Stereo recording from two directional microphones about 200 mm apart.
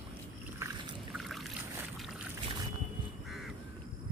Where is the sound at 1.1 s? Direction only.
Centre (ahead or behind).